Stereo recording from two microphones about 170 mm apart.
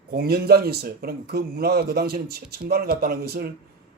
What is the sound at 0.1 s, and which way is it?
Speech, 65° right (ahead or behind).